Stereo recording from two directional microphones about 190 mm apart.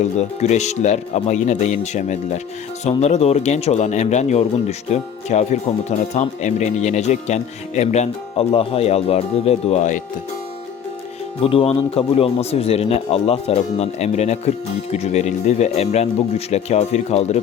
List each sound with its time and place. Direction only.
0.2 s speech: 35° left (ahead or behind)
11.4 s speech: 30° left (ahead or behind)